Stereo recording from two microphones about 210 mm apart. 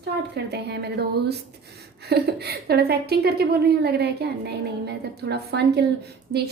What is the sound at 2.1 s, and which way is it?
A woman's voice, 50° right (ahead or behind).